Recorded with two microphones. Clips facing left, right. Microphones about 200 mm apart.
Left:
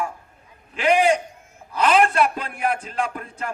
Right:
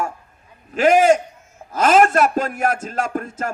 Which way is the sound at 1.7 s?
45° right (ahead or behind).